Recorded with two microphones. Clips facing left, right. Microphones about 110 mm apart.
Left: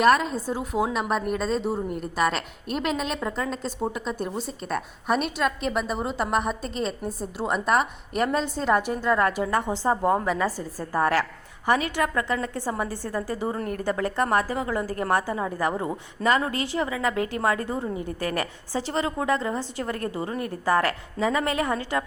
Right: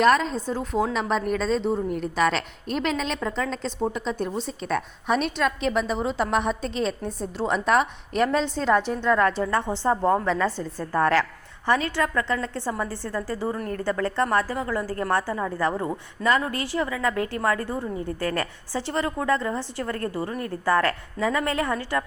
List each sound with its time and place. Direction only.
0.0 s a woman's voice: 5° left (ahead or behind)